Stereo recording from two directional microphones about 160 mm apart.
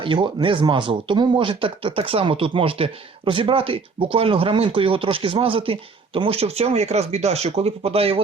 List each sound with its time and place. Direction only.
0.0 s speech: 30° right (ahead or behind)